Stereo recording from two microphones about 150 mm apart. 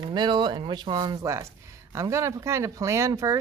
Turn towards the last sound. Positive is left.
turn(degrees=-20)  # may be behind; listen again after turning